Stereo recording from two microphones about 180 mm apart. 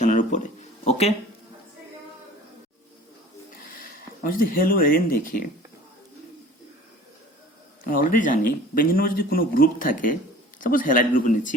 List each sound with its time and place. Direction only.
0.0 s a sound: 45° left (ahead or behind)
0.9 s speech: 35° left (ahead or behind)
3.8 s speech: 50° left (ahead or behind)
7.9 s speech: 50° left (ahead or behind)